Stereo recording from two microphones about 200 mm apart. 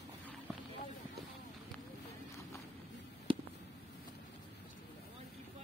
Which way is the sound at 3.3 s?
25° right (ahead or behind).